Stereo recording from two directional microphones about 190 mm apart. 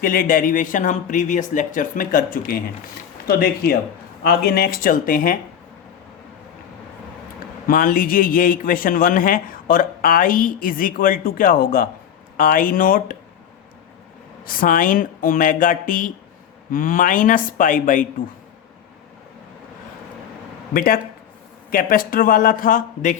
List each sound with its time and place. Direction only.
0.0 s a man's voice: 50° left (ahead or behind)
7.7 s a man's voice: 45° left (ahead or behind)
14.4 s a man's voice: 45° left (ahead or behind)
20.7 s a man's voice: 50° left (ahead or behind)